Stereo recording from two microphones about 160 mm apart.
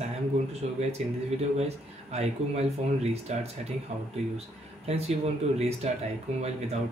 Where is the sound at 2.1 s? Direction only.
40° right (ahead or behind).